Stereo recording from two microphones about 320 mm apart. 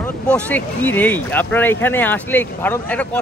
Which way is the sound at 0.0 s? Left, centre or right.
Centre.